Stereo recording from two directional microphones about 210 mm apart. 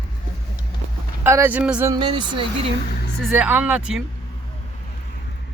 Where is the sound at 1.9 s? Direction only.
20° right (ahead or behind).